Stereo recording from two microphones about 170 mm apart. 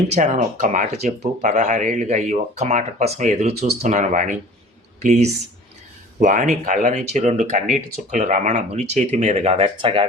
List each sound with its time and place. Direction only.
0.1 s speech: 45° right (ahead or behind)